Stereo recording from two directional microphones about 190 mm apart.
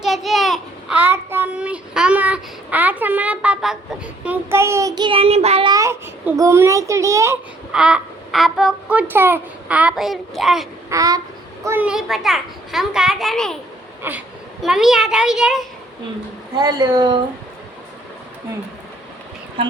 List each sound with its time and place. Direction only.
0.0 s a child's voice: centre (ahead or behind); by 5.7 s 30° right (ahead or behind)
5.7 s a child's voice: 15° right (ahead or behind)
7.7 s a child's voice: 5° right (ahead or behind)
10.8 s a sound: 15° right (ahead or behind)
11.6 s a child's voice: 10° right (ahead or behind)
14.0 s a woman's voice: 10° right (ahead or behind)
16.6 s speech: 20° right (ahead or behind)
19.6 s a woman's voice: 30° right (ahead or behind)